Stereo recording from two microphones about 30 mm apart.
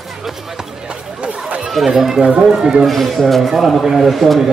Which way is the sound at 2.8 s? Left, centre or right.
Centre.